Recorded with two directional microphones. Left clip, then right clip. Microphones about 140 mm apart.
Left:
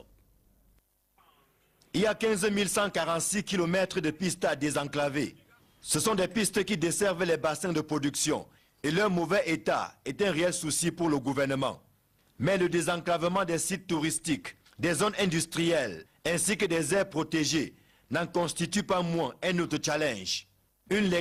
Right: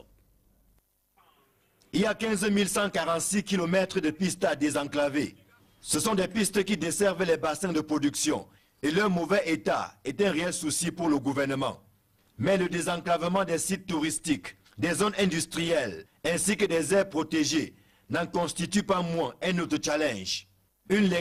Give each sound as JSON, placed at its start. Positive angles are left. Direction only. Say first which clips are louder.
{"t": 1.8, "sound": "a man's voice", "louder": "left 1 dB", "side_deg": -45}
{"t": 12.4, "sound": "a man's voice", "louder": "right 1 dB", "side_deg": -10}